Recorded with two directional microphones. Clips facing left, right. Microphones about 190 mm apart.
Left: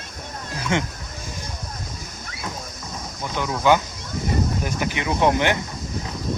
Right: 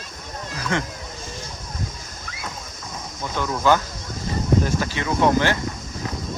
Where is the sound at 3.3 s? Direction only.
15° left (ahead or behind).